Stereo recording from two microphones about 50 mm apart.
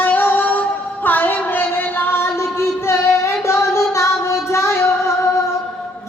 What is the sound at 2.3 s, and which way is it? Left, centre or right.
Singing, left.